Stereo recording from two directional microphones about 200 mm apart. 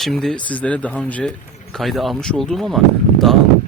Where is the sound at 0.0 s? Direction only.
Centre (ahead or behind).